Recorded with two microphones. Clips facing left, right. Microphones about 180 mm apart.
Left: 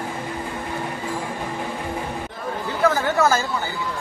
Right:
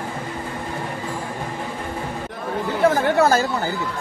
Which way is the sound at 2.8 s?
30° right (ahead or behind).